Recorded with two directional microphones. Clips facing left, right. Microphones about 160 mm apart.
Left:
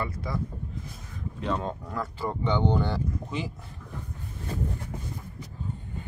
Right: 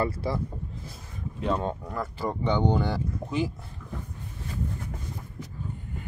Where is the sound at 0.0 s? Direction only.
30° right (ahead or behind).